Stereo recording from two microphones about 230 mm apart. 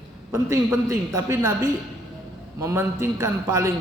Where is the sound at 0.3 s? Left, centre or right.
Centre.